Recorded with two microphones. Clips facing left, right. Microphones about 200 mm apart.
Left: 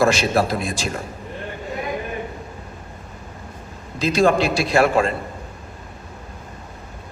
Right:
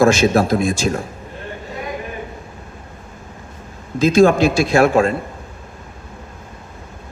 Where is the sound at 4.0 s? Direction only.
45° right (ahead or behind).